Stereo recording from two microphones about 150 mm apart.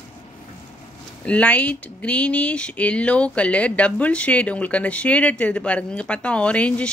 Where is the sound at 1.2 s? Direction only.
10° left (ahead or behind).